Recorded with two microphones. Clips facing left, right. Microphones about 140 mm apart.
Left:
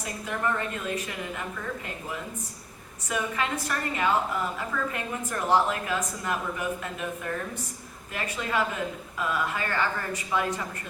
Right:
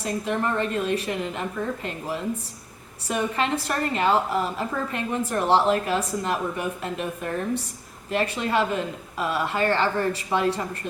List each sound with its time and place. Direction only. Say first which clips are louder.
0.0 s a woman's voice: right 5 dB; 30° right (ahead or behind)
3.1 s a woman's voice: right 5 dB; 30° right (ahead or behind)